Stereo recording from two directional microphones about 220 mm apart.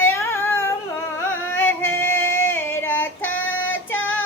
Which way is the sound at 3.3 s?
60° left (ahead or behind).